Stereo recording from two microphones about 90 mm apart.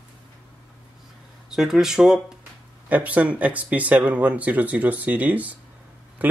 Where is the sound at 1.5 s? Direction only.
5° right (ahead or behind).